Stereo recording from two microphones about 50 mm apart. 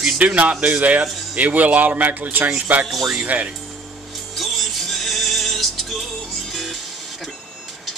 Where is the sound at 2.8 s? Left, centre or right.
Centre.